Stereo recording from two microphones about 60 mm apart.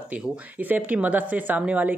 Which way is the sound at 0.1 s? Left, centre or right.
Right.